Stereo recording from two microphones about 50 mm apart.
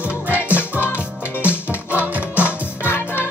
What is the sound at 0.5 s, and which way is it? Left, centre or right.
Music, left.